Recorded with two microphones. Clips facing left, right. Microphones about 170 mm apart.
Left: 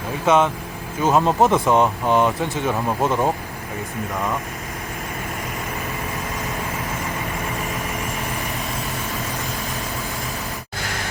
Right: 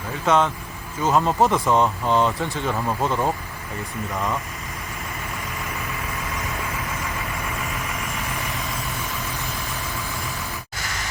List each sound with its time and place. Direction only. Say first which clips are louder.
0.3 s speech: left 2 dB; 15° left (ahead or behind)